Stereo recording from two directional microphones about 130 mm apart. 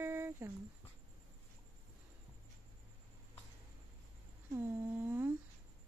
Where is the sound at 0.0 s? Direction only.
15° right (ahead or behind).